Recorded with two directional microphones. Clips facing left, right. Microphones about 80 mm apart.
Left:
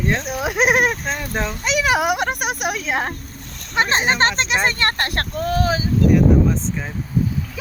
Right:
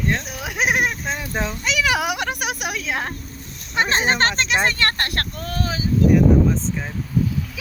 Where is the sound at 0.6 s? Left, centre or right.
Left.